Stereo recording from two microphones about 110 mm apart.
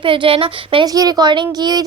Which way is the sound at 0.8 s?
35° right (ahead or behind).